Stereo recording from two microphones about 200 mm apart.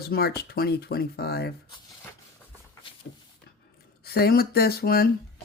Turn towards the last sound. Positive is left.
turn(degrees=50)  # may be behind; listen again after turning